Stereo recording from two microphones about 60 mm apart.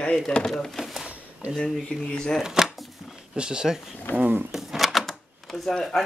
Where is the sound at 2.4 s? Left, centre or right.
Centre.